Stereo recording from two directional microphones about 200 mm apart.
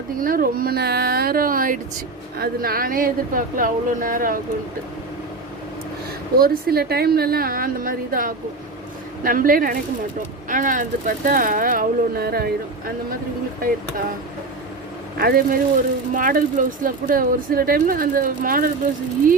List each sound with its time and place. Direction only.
0.2 s speech: 45° right (ahead or behind)
6.3 s speech: 50° right (ahead or behind)
15.2 s speech: 50° right (ahead or behind)